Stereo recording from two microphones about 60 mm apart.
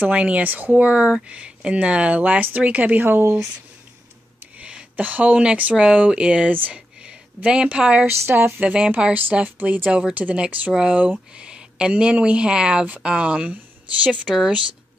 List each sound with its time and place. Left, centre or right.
0.0 s speech: right
4.6 s speech: centre
6.7 s a sound: centre
7.4 s speech: centre
8.3 s speech: right
8.5 s speech: right
14.3 s speech: centre